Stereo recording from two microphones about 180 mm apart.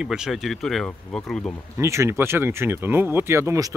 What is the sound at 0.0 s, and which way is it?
Speech, 5° right (ahead or behind).